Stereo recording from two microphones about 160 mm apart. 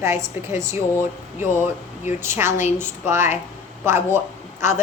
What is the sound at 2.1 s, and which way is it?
A woman's voice, 15° right (ahead or behind).